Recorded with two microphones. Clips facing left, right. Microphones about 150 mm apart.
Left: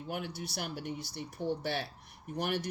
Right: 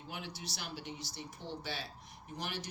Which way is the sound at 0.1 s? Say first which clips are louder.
Left 7 dB; 55° left (ahead or behind).